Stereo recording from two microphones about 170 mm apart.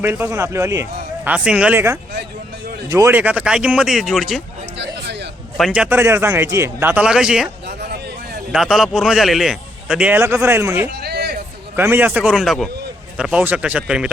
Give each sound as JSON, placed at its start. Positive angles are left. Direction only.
{"t": 0.0, "sound": "a man's voice", "side_deg": -15}
{"t": 5.5, "sound": "speech", "side_deg": 0}
{"t": 8.5, "sound": "a man's voice", "side_deg": 0}
{"t": 11.0, "sound": "a sound", "side_deg": -70}
{"t": 11.8, "sound": "speech", "side_deg": -10}